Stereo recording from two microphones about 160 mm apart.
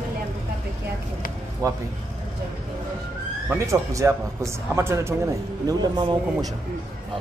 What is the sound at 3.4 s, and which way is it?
Speech, 20° right (ahead or behind).